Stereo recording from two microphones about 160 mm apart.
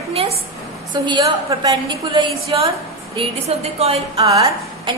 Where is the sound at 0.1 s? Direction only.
40° right (ahead or behind).